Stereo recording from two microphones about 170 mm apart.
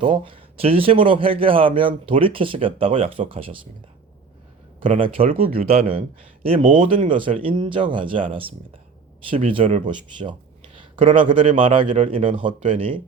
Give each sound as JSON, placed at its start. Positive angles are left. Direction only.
{"t": 0.0, "sound": "a man's voice", "side_deg": -30}
{"t": 4.9, "sound": "a man's voice", "side_deg": -30}
{"t": 5.4, "sound": "speech", "side_deg": -60}
{"t": 5.6, "sound": "a man's voice", "side_deg": -35}